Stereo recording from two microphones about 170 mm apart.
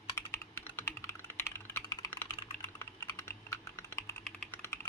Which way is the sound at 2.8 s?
15° left (ahead or behind).